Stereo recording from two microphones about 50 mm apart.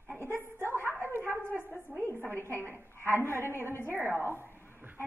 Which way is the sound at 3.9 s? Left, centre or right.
Right.